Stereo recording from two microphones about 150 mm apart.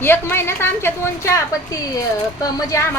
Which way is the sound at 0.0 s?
15° left (ahead or behind).